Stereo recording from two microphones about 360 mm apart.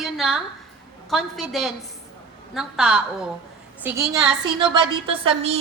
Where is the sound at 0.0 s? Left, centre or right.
Centre.